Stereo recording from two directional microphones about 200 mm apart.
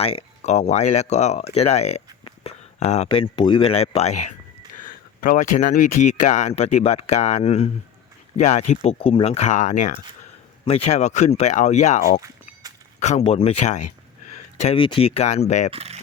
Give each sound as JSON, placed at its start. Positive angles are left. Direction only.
{"t": 0.0, "sound": "speech", "side_deg": 30}
{"t": 15.7, "sound": "speech", "side_deg": -30}